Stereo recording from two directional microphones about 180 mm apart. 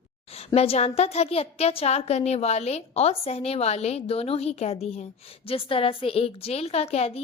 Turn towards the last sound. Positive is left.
turn(degrees=35)  # may be behind; listen again after turning